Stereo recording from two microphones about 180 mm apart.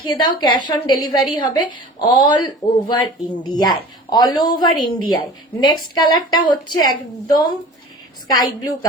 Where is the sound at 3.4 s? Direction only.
25° left (ahead or behind).